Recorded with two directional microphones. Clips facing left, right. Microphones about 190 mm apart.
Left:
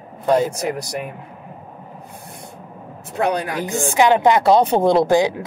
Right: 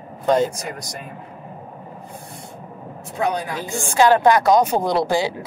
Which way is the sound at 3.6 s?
20° left (ahead or behind).